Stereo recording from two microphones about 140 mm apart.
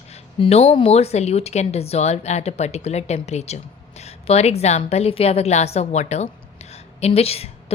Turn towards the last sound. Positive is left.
turn(degrees=45)  # may be behind; listen again after turning